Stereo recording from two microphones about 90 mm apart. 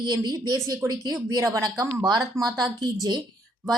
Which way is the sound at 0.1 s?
50° right (ahead or behind).